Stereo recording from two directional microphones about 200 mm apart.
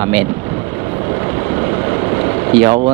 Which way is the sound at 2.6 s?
25° right (ahead or behind).